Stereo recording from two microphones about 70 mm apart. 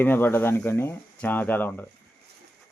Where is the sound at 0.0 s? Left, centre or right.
Left.